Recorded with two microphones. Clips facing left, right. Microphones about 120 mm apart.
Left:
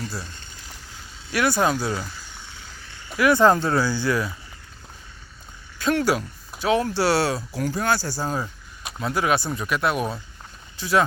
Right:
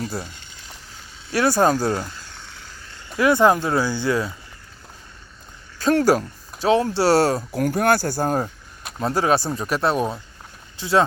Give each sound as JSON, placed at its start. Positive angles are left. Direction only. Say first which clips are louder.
{"t": 0.0, "sound": "speech", "louder": "right 4 dB", "side_deg": -55}
{"t": 0.6, "sound": "vehicle", "louder": "even", "side_deg": -30}
{"t": 2.1, "sound": "a sound", "louder": "right 1 dB", "side_deg": 15}
{"t": 3.2, "sound": "speech", "louder": "right 1 dB", "side_deg": -20}
{"t": 5.8, "sound": "speech", "louder": "right 4 dB", "side_deg": -40}
{"t": 6.6, "sound": "speech", "louder": "right 3 dB", "side_deg": -30}
{"t": 7.1, "sound": "speech", "louder": "right 5 dB", "side_deg": -45}
{"t": 9.0, "sound": "speech", "louder": "right 3 dB", "side_deg": -35}